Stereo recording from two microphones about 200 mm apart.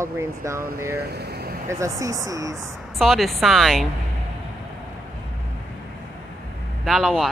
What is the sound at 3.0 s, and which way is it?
Speech, centre (ahead or behind).